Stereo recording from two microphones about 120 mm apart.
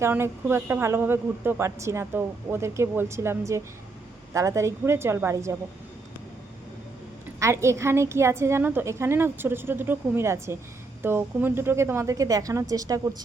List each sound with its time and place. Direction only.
0.0 s speech: 20° right (ahead or behind)
7.3 s speech: 25° right (ahead or behind)